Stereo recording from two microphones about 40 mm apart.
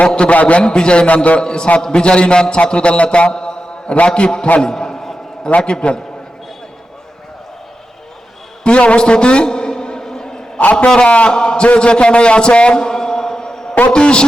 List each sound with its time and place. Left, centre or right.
0.1 s a man's voice: left
1.4 s a man's voice: left
4.6 s a sound: centre
5.6 s a man's voice: left
8.6 s a sound: left
10.6 s a man's voice: left
10.8 s a man's voice: left